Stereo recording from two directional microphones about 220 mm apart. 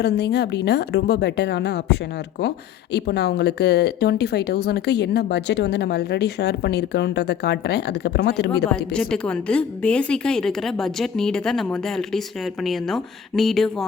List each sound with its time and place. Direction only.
0.0 s speech: 50° left (ahead or behind)
8.9 s a woman's voice: 5° left (ahead or behind)